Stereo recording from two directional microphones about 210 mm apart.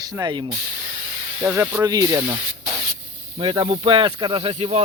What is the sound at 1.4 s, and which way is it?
Speech, 10° right (ahead or behind).